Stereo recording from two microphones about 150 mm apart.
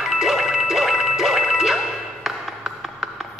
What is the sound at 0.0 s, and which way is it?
Music, centre (ahead or behind).